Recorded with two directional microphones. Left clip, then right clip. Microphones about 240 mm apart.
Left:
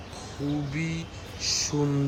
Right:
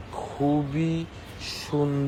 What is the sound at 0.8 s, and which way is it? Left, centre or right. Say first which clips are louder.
Speech: right 4 dB; right.